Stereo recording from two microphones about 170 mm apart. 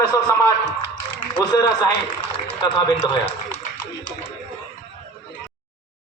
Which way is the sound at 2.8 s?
25° left (ahead or behind).